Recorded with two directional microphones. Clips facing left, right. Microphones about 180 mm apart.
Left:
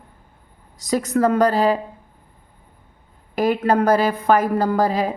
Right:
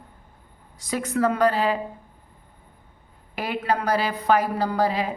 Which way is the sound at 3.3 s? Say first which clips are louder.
Left 8 dB; 45° left (ahead or behind).